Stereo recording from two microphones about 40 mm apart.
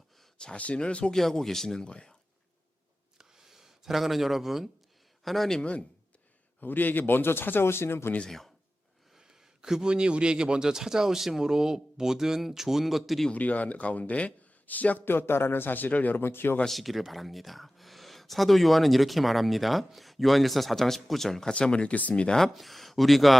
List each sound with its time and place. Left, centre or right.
0.5 s speech: left
1.1 s speech: centre
3.2 s a sound: centre
5.2 s speech: centre
6.6 s speech: left
8.3 s speech: centre
9.1 s a man's voice: centre
13.3 s speech: left
15.3 s speech: left
15.9 s speech: left
16.1 s speech: left
16.6 s speech: centre
21.5 s speech: left
22.5 s speech: centre